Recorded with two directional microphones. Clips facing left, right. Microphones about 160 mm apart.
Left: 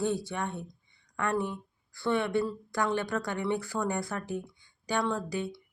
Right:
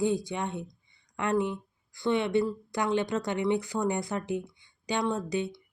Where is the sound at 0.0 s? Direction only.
15° right (ahead or behind).